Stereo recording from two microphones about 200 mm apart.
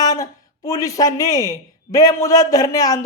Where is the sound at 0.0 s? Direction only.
20° left (ahead or behind).